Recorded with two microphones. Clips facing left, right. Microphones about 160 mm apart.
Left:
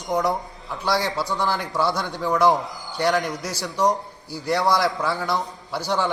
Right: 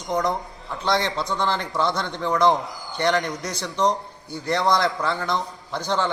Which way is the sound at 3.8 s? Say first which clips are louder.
Left 1 dB; 20° right (ahead or behind).